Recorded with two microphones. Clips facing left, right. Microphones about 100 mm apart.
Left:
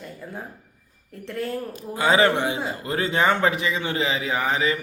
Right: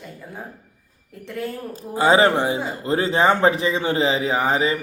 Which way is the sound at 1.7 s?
30° right (ahead or behind).